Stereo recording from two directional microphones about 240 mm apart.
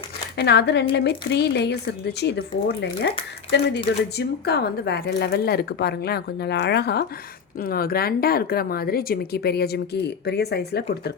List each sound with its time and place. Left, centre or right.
0.3 s a woman's voice: left